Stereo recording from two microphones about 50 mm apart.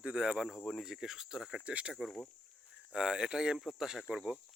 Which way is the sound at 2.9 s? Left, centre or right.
Centre.